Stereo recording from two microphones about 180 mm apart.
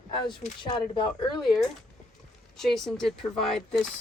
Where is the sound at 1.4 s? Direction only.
Centre (ahead or behind).